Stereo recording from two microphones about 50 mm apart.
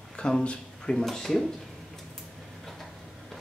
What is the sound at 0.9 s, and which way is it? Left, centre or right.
Speech, centre.